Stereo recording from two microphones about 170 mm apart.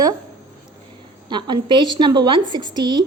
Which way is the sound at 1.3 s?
25° right (ahead or behind).